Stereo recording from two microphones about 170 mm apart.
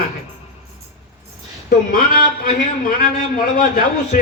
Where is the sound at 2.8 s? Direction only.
55° left (ahead or behind).